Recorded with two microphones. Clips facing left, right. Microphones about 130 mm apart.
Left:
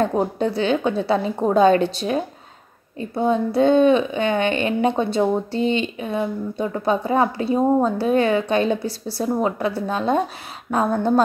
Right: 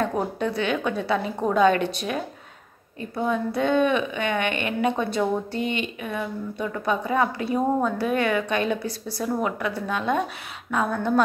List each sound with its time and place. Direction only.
0.0 s a woman's voice: 30° left (ahead or behind)